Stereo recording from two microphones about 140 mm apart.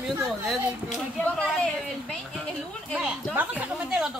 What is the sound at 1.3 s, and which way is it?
A woman's voice, 5° left (ahead or behind).